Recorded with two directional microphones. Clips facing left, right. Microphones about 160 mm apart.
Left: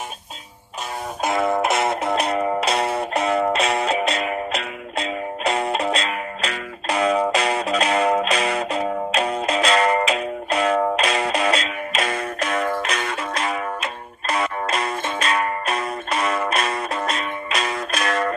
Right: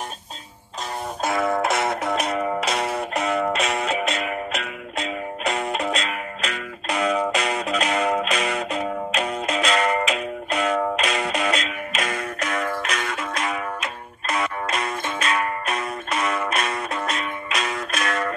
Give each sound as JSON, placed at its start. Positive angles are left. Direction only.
{"t": 1.2, "sound": "music", "side_deg": 25}